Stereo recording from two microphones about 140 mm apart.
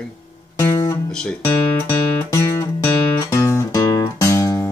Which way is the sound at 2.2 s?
20° left (ahead or behind).